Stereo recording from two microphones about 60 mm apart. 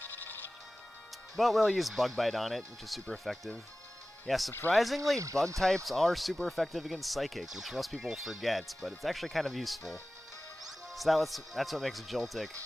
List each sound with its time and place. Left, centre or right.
0.0 s music: left
1.3 s speech: centre
5.2 s speech: right
5.9 s speech: centre